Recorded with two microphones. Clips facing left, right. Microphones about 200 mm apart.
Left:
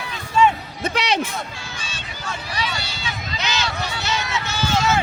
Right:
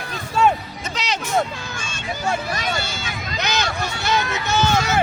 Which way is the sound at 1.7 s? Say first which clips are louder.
Right 6 dB; 50° right (ahead or behind).